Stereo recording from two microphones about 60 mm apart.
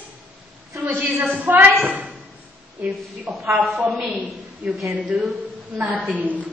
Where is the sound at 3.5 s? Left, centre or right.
Centre.